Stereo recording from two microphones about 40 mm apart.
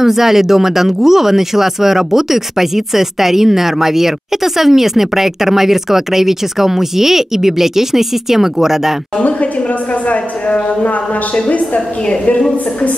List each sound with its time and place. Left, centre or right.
0.0 s speech: centre
10.0 s speech: left